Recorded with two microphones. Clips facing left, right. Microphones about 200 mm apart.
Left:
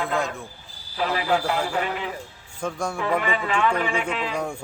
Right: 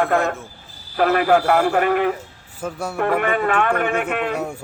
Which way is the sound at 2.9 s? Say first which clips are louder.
Right 7 dB; 55° right (ahead or behind).